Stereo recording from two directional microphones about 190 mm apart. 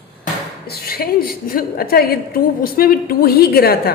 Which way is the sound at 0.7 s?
55° left (ahead or behind).